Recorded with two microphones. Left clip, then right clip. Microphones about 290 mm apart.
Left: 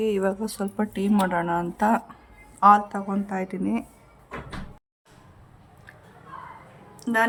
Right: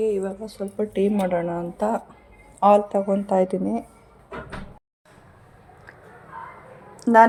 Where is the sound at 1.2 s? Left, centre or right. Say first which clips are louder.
Even; left.